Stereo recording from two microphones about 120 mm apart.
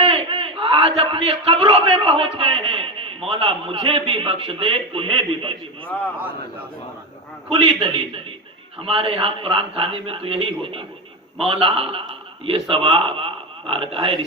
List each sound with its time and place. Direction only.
0.0 s a man's voice: 50° right (ahead or behind)
7.5 s a man's voice: 50° right (ahead or behind)